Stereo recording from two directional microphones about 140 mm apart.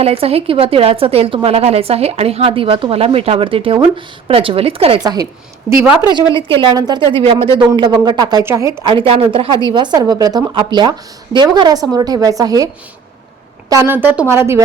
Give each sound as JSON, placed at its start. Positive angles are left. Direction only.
{"t": 0.0, "sound": "speech", "side_deg": -45}
{"t": 5.0, "sound": "a woman's voice", "side_deg": -25}
{"t": 5.8, "sound": "speech", "side_deg": -10}
{"t": 6.1, "sound": "a woman's voice", "side_deg": -35}